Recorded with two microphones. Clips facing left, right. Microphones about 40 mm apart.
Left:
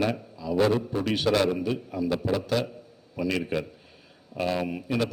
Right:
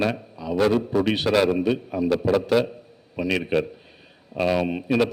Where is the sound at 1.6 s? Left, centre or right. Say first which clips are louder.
Right 5 dB; right.